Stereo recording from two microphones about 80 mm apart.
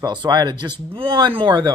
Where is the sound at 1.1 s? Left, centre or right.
Right.